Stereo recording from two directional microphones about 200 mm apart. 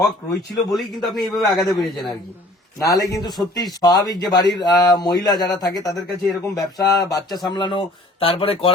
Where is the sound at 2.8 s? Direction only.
15° left (ahead or behind).